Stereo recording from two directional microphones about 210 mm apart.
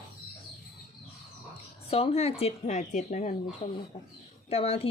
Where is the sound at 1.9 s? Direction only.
30° left (ahead or behind).